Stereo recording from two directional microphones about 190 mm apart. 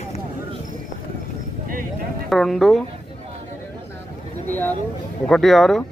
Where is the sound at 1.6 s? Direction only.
45° right (ahead or behind).